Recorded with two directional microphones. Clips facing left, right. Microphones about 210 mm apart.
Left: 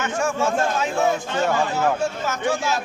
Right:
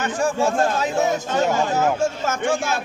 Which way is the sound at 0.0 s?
35° right (ahead or behind).